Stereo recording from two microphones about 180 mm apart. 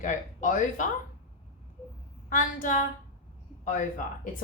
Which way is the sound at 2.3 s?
50° left (ahead or behind).